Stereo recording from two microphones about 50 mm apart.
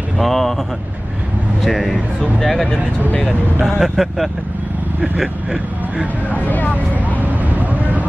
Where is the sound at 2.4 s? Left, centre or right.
Centre.